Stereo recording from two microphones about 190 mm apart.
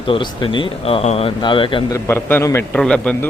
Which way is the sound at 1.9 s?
15° left (ahead or behind).